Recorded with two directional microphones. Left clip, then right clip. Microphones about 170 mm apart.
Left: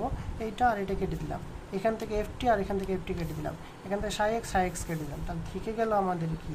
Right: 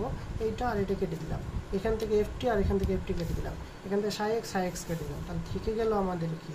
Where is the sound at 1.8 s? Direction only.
55° left (ahead or behind).